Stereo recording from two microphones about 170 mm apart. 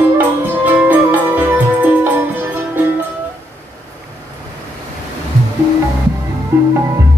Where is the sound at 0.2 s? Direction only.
10° right (ahead or behind).